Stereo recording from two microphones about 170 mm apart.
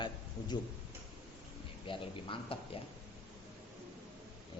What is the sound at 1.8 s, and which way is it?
Speech, 30° left (ahead or behind).